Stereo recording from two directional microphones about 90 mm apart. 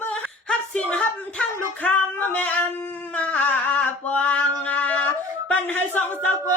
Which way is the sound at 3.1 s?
15° left (ahead or behind).